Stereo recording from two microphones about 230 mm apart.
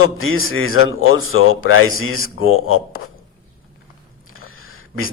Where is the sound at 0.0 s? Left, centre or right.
Left.